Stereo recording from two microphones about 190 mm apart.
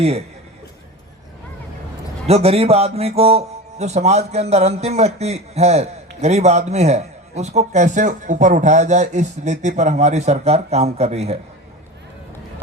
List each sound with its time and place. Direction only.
0.0 s a man's voice: 30° right (ahead or behind)
2.2 s a man's voice: 35° right (ahead or behind)